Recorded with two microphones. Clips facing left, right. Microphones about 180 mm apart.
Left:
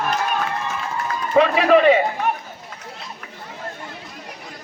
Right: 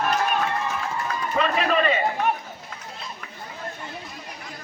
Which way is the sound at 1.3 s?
70° left (ahead or behind).